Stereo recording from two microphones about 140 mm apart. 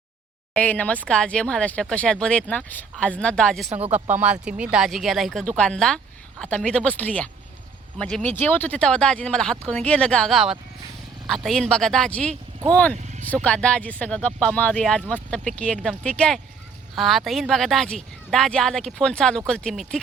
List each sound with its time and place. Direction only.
0.5 s speech: 10° left (ahead or behind)
3.7 s speech: 45° right (ahead or behind)
3.9 s a woman's voice: 10° right (ahead or behind); by 20.0 s 5° left (ahead or behind)